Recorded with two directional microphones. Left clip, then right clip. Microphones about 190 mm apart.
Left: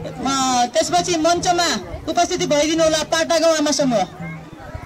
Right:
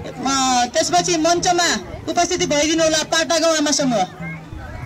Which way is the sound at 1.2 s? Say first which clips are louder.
Even; 45° left (ahead or behind).